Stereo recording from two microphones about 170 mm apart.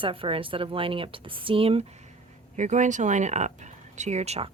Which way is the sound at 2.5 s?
45° right (ahead or behind).